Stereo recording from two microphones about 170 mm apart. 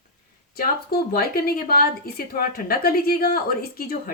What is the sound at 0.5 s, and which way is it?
A woman's voice, 65° left (ahead or behind).